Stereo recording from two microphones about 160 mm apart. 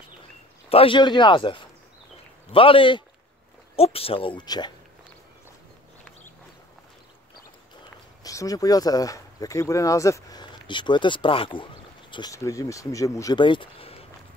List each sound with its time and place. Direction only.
0.7 s speech: 35° left (ahead or behind)
8.2 s speech: 20° left (ahead or behind)